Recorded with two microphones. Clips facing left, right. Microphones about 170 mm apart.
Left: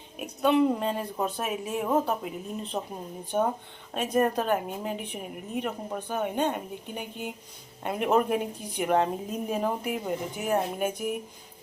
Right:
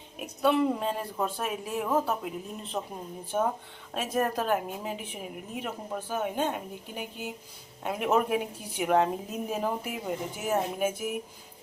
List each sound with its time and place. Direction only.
0.2 s a woman's voice: centre (ahead or behind)
2.8 s speech: 15° left (ahead or behind)
3.3 s a woman's voice: centre (ahead or behind)